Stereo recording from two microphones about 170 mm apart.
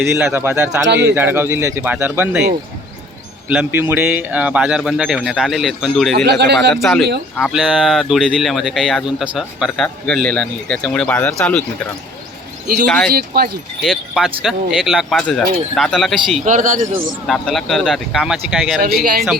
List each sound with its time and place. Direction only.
0.3 s speech: 15° right (ahead or behind)
0.9 s a man's voice: 90° right
1.1 s speech: 10° right (ahead or behind)
3.5 s speech: 10° right (ahead or behind)
6.2 s speech: 80° right
6.7 s speech: centre (ahead or behind)
13.1 s speech: 60° right (ahead or behind)
13.8 s speech: centre (ahead or behind)
16.4 s speech: 50° right (ahead or behind)
17.2 s speech: centre (ahead or behind)
18.8 s speech: 65° right (ahead or behind)